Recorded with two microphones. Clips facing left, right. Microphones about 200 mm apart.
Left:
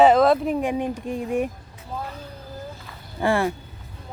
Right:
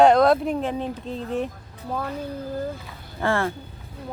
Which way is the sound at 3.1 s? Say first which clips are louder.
Left 2 dB; 15° left (ahead or behind).